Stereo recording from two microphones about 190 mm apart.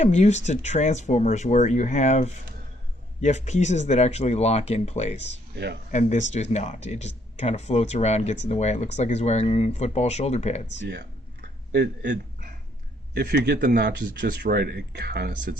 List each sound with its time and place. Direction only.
0.0 s speech: 40° left (ahead or behind)
11.7 s speech: 65° right (ahead or behind)